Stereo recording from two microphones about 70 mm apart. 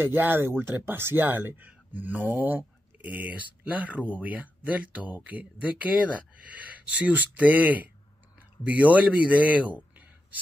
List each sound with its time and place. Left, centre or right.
0.0 s a man's voice: right